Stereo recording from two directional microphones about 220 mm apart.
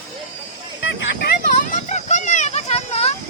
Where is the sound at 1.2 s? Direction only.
35° left (ahead or behind).